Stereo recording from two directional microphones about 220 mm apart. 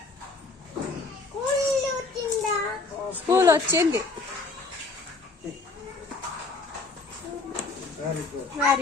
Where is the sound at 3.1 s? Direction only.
15° right (ahead or behind).